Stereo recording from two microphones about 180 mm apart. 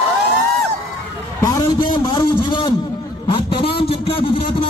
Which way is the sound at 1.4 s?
20° left (ahead or behind).